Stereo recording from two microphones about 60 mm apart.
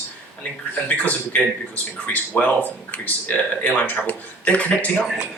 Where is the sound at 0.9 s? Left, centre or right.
Left.